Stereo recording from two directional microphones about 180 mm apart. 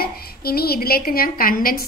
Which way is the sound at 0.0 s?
60° left (ahead or behind).